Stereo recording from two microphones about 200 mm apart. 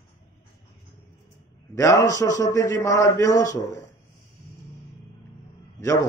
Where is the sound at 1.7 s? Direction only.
15° left (ahead or behind).